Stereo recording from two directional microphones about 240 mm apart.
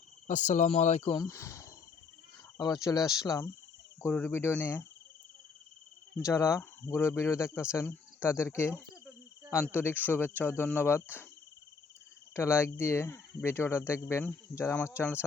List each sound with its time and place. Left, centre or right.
0.3 s speech: left; by 4.8 s centre
6.2 s speech: centre
12.3 s speech: centre